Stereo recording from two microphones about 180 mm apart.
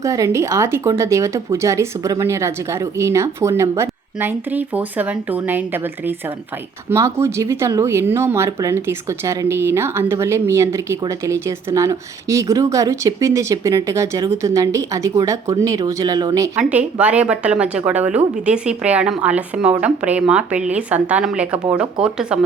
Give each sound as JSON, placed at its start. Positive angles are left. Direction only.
{"t": 0.0, "sound": "speech", "side_deg": -15}
{"t": 16.6, "sound": "speech", "side_deg": -5}